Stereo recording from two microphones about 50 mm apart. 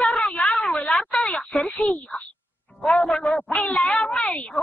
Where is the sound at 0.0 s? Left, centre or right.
Centre.